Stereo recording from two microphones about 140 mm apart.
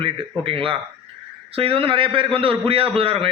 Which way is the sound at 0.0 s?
40° right (ahead or behind).